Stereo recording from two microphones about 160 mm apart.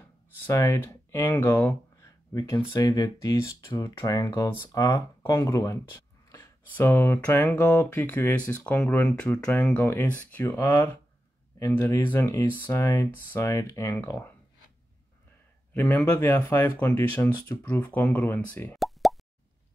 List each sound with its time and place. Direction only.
0.5 s speech: 15° left (ahead or behind)
15.7 s speech: 10° left (ahead or behind)
18.8 s plop: centre (ahead or behind)